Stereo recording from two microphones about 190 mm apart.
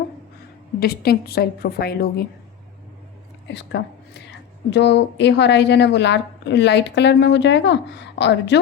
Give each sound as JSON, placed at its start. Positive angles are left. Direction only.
{"t": 0.8, "sound": "a woman's voice", "side_deg": 55}
{"t": 3.5, "sound": "a woman's voice", "side_deg": 65}